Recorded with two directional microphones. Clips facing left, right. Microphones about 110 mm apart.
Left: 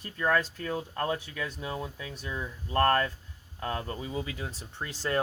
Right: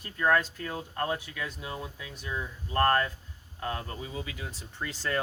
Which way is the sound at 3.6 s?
35° left (ahead or behind).